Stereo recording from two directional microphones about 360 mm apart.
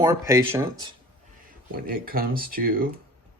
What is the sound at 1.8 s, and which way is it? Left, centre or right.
Speech, right.